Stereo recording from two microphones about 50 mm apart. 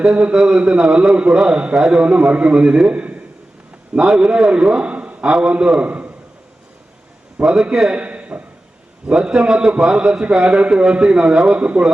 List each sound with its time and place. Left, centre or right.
0.0 s a man's voice: right
7.4 s a man's voice: centre
7.9 s a sound: right
9.0 s a man's voice: centre